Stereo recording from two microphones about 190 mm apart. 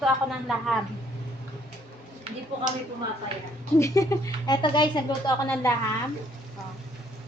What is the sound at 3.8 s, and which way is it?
Speech, 15° left (ahead or behind).